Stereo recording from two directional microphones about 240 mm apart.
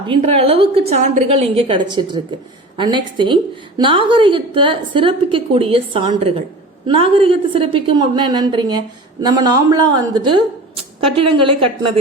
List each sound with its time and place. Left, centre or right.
0.1 s a woman's voice: right